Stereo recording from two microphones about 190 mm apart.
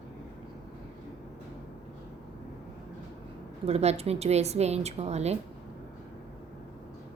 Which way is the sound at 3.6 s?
35° right (ahead or behind).